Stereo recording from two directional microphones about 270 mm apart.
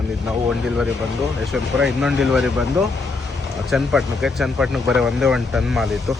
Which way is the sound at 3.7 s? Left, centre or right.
Centre.